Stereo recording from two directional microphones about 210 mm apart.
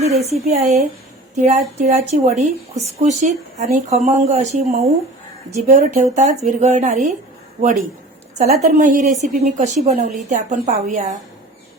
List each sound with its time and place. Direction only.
0.0 s speech: 30° right (ahead or behind)
8.4 s a woman's voice: 45° right (ahead or behind)
8.6 s speech: 35° right (ahead or behind)